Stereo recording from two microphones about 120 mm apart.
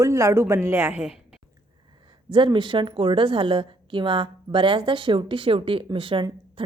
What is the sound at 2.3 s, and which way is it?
A woman's voice, 40° right (ahead or behind).